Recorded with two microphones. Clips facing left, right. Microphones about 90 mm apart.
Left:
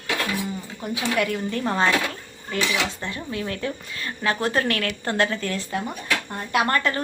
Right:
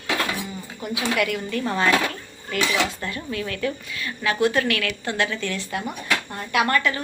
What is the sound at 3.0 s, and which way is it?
A woman's voice, 25° left (ahead or behind).